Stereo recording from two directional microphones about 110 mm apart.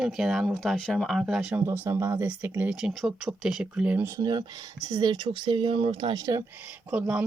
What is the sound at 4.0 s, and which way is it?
Speech, 30° right (ahead or behind).